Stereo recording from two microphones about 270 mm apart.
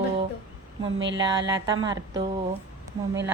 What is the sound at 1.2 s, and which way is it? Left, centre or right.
Speech, centre.